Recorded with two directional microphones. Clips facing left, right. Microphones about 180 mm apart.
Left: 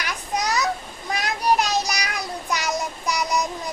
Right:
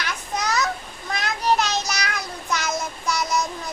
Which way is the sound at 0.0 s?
15° left (ahead or behind).